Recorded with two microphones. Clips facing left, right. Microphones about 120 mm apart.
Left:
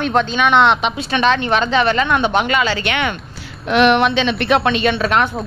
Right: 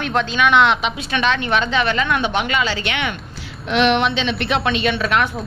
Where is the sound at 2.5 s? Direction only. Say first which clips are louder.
Left 3 dB; 55° left (ahead or behind).